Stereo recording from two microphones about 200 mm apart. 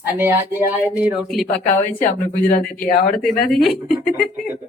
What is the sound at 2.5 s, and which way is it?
Speech, 45° left (ahead or behind).